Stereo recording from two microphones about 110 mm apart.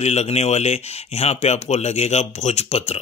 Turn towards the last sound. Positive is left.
turn(degrees=70)  # may be behind; listen again after turning